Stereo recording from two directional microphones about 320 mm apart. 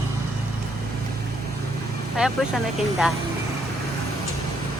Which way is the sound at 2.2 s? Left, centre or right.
Centre.